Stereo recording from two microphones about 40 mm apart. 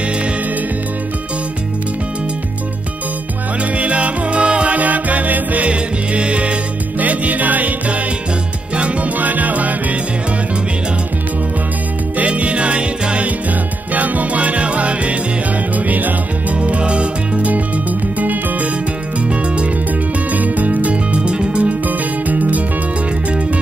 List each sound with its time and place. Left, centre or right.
3.7 s music: right
4.7 s music: right
5.7 s music: right
7.0 s music: right
12.2 s music: right
13.9 s music: right
15.7 s music: right
16.5 s music: right
18.2 s music: right
19.1 s music: right
21.8 s music: right